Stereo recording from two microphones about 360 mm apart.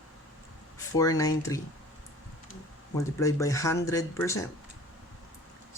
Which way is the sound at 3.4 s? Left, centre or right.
Centre.